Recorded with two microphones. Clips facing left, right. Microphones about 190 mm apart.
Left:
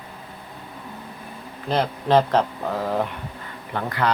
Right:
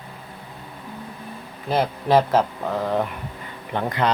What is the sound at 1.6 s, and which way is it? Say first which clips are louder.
Speech: right 1 dB; 5° right (ahead or behind).